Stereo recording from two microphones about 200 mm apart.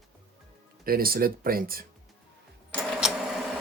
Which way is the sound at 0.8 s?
45° right (ahead or behind).